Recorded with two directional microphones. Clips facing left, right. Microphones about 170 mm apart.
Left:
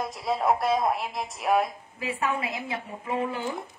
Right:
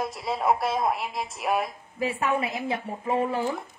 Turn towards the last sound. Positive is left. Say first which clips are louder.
# right 4 dB
turn(degrees=-30)  # may be behind; listen again after turning